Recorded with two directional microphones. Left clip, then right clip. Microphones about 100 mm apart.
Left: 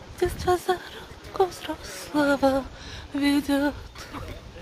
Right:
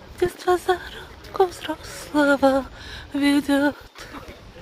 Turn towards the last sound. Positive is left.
turn(degrees=-30)  # may be behind; listen again after turning